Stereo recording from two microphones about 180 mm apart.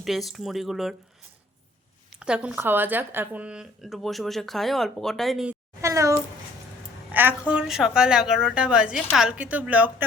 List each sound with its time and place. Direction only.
0.0 s speech: centre (ahead or behind)
2.1 s speech: 5° right (ahead or behind)
5.8 s a child's voice: 15° right (ahead or behind)